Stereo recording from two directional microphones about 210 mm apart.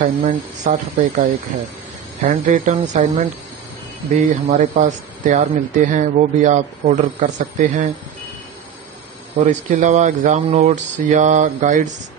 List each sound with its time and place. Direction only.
0.0 s speech: 40° right (ahead or behind)
9.5 s speech: 35° right (ahead or behind)